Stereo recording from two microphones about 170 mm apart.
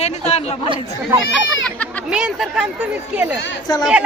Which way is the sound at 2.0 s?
5° right (ahead or behind).